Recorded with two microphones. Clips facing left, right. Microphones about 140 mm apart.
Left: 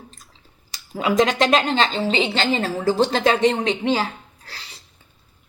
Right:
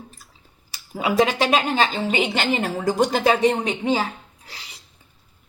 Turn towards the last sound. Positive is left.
turn(degrees=-10)  # may be behind; listen again after turning